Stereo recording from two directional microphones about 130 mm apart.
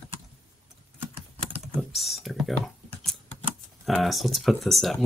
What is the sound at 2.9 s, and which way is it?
Typing, 10° left (ahead or behind).